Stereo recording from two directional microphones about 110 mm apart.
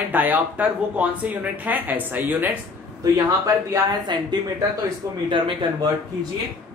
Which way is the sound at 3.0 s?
30° right (ahead or behind).